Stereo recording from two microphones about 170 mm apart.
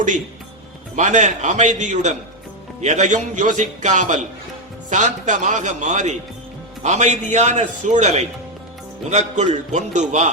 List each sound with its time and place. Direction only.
0.9 s a man's voice: 45° right (ahead or behind)